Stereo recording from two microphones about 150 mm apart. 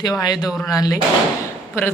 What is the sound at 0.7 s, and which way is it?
Speech, 25° left (ahead or behind).